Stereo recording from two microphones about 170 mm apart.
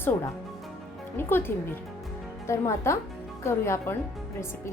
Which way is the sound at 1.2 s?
15° left (ahead or behind).